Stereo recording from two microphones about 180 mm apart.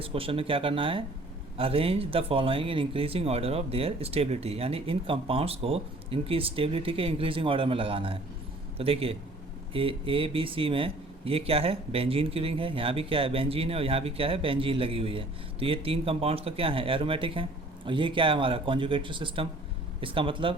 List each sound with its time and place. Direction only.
0.0 s speech: 30° right (ahead or behind)